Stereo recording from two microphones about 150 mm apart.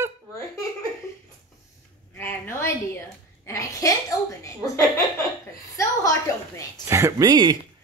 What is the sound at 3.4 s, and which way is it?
Speech, 20° left (ahead or behind).